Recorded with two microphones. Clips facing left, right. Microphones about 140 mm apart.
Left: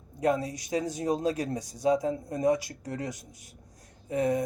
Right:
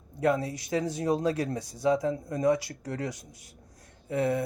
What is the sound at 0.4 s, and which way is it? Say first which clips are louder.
A man's voice: right 1 dB; 15° left (ahead or behind).